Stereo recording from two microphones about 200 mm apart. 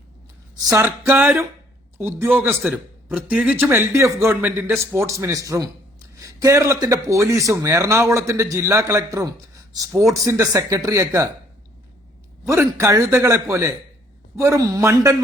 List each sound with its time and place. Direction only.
0.6 s a man's voice: 15° right (ahead or behind)
12.5 s a man's voice: 15° right (ahead or behind)